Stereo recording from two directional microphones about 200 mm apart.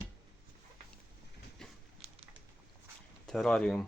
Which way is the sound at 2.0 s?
30° right (ahead or behind).